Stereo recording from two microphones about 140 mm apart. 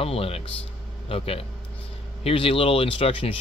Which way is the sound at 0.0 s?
45° left (ahead or behind).